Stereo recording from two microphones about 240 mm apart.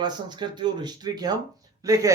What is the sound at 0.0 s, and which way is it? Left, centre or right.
Speech, centre.